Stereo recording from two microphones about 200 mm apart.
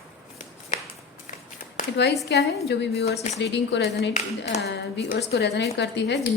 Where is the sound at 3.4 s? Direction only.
60° left (ahead or behind).